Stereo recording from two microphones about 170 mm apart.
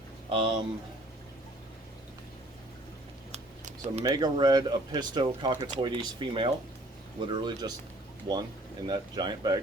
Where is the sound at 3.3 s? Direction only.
45° right (ahead or behind).